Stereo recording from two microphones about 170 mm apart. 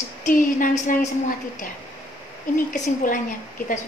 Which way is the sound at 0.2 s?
50° left (ahead or behind).